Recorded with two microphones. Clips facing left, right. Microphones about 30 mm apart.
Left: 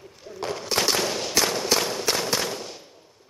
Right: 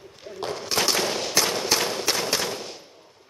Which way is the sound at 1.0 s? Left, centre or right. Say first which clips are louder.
Even; centre.